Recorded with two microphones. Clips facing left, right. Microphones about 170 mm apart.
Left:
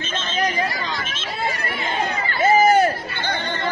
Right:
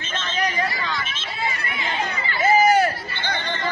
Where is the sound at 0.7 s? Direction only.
45° left (ahead or behind).